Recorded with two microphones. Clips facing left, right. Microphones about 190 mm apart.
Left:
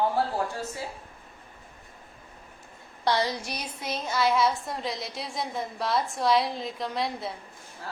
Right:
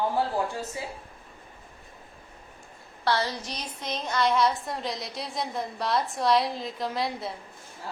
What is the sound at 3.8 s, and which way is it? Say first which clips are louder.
A woman's voice: even; 5° left (ahead or behind).